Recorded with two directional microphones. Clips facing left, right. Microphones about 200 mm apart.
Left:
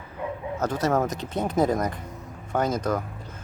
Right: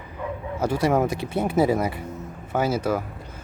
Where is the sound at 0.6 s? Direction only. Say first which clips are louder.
Right 3 dB; 10° right (ahead or behind).